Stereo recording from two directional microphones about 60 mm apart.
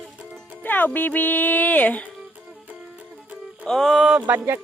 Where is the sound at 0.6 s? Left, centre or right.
Left.